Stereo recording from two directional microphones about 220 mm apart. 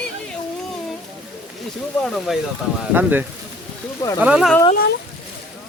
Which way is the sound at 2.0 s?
Centre (ahead or behind).